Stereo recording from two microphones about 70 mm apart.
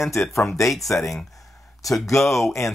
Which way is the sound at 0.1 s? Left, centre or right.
Left.